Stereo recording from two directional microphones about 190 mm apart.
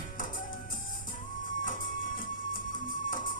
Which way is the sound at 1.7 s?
45° left (ahead or behind).